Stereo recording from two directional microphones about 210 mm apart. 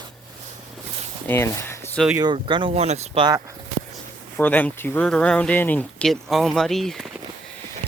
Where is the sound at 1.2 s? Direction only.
10° left (ahead or behind).